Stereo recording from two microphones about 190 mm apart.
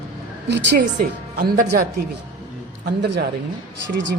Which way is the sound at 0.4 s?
65° right (ahead or behind).